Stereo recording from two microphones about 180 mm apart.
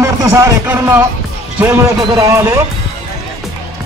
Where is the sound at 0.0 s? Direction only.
15° right (ahead or behind).